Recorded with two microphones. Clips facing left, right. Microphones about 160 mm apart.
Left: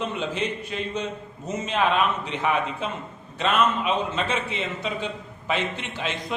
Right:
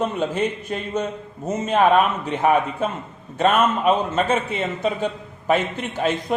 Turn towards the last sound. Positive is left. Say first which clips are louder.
# right 7 dB
turn(degrees=-50)  # may be behind; listen again after turning